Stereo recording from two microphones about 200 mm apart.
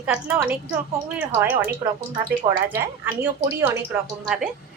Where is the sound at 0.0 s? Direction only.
5° right (ahead or behind).